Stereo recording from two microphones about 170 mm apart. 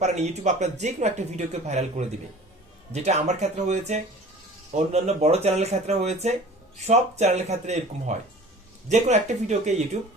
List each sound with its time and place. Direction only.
0.0 s speech: 40° right (ahead or behind)